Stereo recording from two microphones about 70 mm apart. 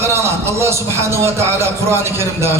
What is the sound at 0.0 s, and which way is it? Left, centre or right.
A man's voice, right.